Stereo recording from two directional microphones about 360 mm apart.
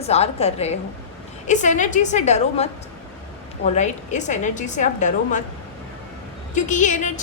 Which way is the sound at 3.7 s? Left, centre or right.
Centre.